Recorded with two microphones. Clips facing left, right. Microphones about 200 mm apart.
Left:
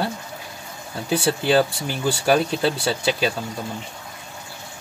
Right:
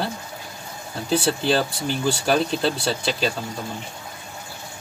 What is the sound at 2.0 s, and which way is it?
Speech, 10° left (ahead or behind).